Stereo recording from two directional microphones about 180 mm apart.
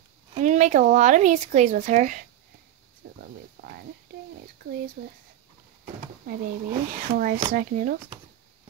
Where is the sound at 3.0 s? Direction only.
60° right (ahead or behind).